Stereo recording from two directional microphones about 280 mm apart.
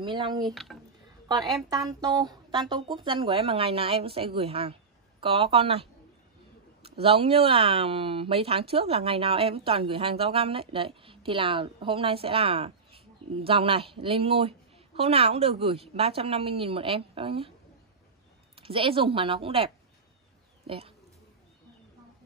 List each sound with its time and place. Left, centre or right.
0.0 s speech: centre
1.7 s speech: centre
18.6 s speech: centre